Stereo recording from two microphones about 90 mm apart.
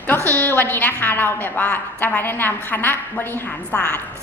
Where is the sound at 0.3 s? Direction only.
20° left (ahead or behind).